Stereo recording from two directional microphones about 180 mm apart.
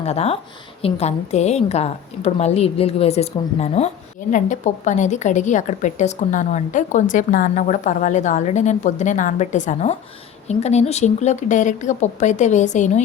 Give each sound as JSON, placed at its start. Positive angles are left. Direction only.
{"t": 0.0, "sound": "a woman's voice", "side_deg": 35}